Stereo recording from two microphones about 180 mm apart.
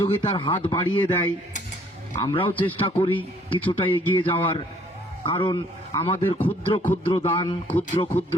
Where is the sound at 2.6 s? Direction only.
30° left (ahead or behind).